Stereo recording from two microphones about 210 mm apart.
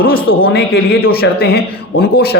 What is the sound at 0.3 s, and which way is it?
Speech, 45° left (ahead or behind).